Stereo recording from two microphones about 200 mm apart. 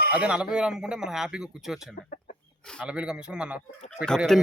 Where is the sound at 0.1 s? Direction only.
5° right (ahead or behind).